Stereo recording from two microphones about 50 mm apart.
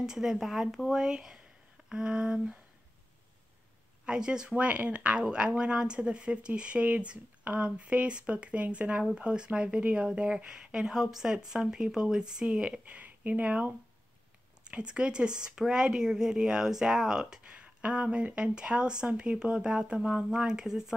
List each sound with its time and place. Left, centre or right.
0.0 s speech: centre
4.0 s speech: centre
14.6 s speech: centre
17.4 s speech: right; by 20.9 s centre